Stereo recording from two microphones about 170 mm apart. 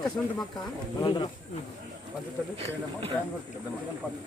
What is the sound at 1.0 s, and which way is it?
Speech, 25° left (ahead or behind).